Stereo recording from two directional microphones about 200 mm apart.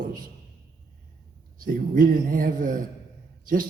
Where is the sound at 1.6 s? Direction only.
45° right (ahead or behind).